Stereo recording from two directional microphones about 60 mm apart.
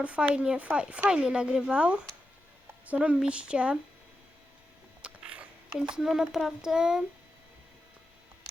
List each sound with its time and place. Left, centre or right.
0.0 s speech: right
5.0 s speech: right